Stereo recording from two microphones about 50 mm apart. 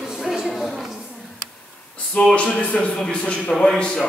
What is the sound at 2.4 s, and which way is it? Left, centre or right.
A man's voice, left.